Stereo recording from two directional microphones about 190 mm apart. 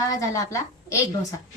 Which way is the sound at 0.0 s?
15° left (ahead or behind).